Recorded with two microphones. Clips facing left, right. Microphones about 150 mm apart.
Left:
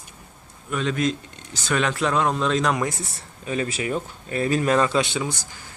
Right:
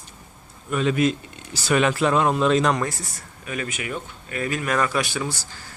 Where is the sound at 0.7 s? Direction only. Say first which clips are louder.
Right 3 dB; 5° right (ahead or behind).